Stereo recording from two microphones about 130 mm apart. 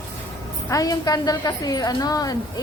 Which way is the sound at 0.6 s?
25° left (ahead or behind).